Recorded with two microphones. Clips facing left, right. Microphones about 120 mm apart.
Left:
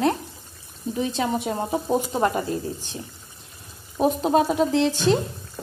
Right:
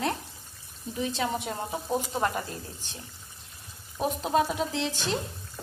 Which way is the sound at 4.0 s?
35° left (ahead or behind).